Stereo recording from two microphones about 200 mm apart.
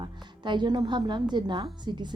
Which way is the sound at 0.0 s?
25° right (ahead or behind).